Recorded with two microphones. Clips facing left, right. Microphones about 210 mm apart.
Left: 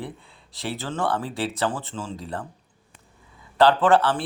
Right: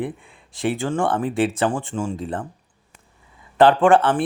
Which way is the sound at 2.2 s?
50° right (ahead or behind).